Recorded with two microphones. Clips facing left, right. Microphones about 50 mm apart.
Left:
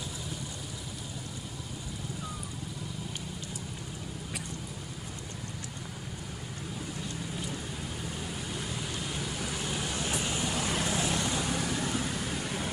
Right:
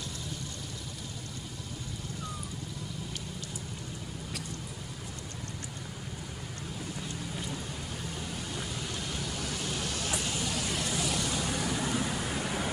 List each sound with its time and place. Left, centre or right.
9.1 s vehicle: centre
11.4 s vehicle: centre